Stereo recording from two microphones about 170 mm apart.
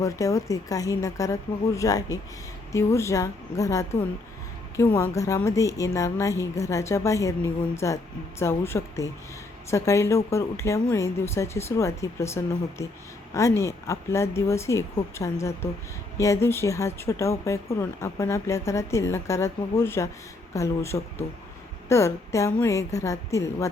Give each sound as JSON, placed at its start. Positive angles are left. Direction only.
{"t": 0.0, "sound": "speech", "side_deg": 20}